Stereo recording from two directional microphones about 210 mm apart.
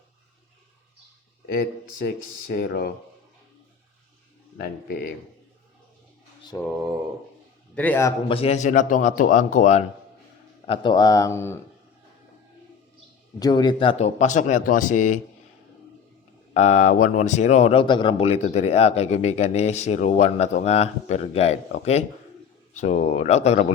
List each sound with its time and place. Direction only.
1.5 s speech: 45° left (ahead or behind)
4.5 s speech: 50° left (ahead or behind)
7.8 s speech: 10° left (ahead or behind)
8.3 s speech: 30° left (ahead or behind)
10.7 s speech: 20° left (ahead or behind)
13.4 s speech: 20° left (ahead or behind); by 15.2 s 35° left (ahead or behind)
16.6 s speech: 35° left (ahead or behind)